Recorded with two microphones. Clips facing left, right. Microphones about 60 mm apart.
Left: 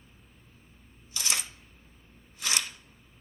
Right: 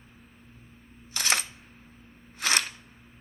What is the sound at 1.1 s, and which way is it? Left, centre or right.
Camera, right.